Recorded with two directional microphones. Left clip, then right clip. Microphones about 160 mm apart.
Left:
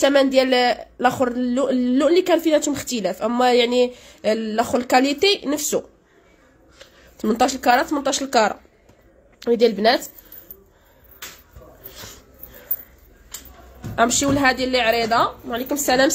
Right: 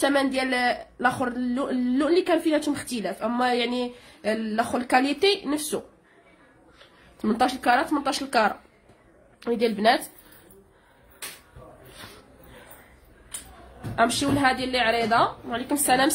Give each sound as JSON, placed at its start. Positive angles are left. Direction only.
{"t": 0.0, "sound": "speech", "side_deg": 30}
{"t": 7.2, "sound": "a woman's voice", "side_deg": 30}
{"t": 12.0, "sound": "dog", "side_deg": 25}
{"t": 13.9, "sound": "a woman's voice", "side_deg": 30}